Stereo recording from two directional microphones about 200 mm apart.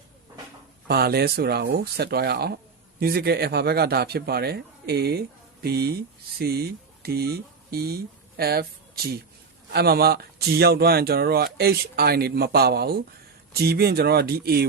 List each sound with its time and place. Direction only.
0.9 s speech: 50° right (ahead or behind)